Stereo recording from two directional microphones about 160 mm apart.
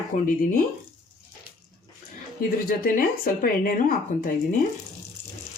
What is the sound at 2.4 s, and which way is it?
Speech, 65° left (ahead or behind).